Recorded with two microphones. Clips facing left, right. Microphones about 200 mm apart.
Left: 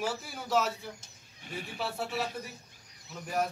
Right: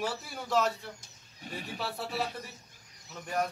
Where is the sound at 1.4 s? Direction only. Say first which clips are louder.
Right 1 dB; 40° right (ahead or behind).